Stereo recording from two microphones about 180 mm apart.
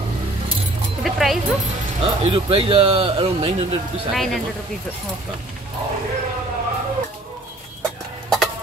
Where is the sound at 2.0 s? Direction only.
30° right (ahead or behind).